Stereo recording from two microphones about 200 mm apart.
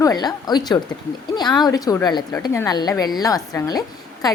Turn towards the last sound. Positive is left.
turn(degrees=20)  # may be behind; listen again after turning